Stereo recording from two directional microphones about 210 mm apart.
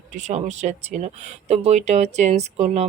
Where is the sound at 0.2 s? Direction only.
35° right (ahead or behind).